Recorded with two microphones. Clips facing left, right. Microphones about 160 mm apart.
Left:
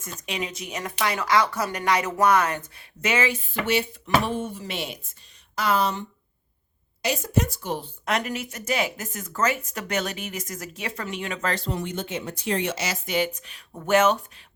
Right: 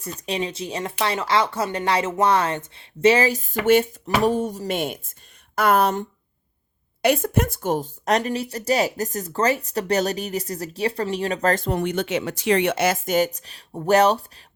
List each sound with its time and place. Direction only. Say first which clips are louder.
0.0 s a woman's voice: right 5 dB; 35° right (ahead or behind)